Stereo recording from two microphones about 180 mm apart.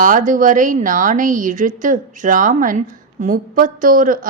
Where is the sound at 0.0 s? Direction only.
45° right (ahead or behind).